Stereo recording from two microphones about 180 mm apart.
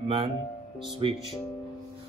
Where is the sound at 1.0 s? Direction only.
30° right (ahead or behind).